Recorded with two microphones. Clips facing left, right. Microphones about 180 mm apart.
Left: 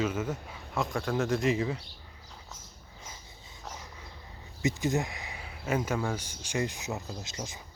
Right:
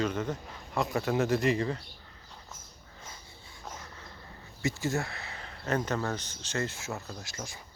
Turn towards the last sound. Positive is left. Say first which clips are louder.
# left 2 dB
turn(degrees=20)  # may be behind; listen again after turning